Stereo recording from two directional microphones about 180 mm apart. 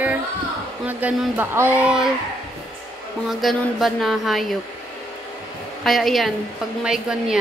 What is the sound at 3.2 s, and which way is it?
Speech, centre (ahead or behind).